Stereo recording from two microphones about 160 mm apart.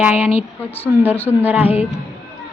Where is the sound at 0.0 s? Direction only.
10° right (ahead or behind).